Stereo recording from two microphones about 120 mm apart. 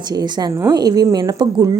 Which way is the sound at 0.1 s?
35° right (ahead or behind).